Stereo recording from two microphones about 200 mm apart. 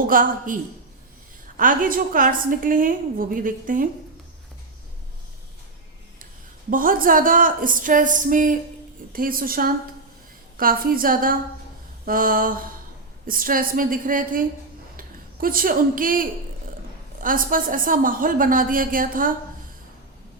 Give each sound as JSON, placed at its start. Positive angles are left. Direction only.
{"t": 0.0, "sound": "a woman's voice", "side_deg": -45}
{"t": 6.7, "sound": "a woman's voice", "side_deg": -45}